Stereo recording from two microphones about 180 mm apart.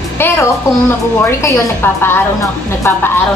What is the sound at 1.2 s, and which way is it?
A woman's voice, 15° left (ahead or behind).